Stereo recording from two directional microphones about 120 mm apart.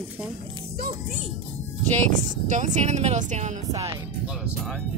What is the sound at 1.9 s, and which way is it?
Speech, 90° right.